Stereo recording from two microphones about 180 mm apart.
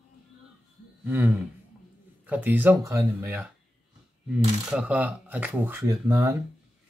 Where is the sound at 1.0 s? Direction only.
10° right (ahead or behind).